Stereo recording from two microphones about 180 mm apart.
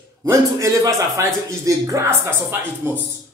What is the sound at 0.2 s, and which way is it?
Speech, 15° right (ahead or behind).